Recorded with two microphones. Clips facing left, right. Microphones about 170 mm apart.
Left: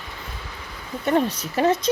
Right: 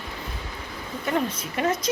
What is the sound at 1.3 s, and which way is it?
Speech, 35° left (ahead or behind).